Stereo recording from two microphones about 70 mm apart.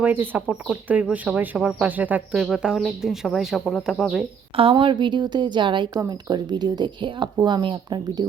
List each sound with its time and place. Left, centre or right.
0.0 s speech: right
2.3 s speech: centre
4.7 s speech: right
6.0 s speech: right